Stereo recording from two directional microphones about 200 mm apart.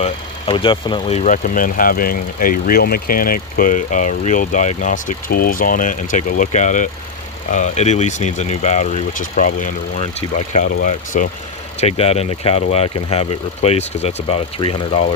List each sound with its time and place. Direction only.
0.0 s speech: 25° left (ahead or behind)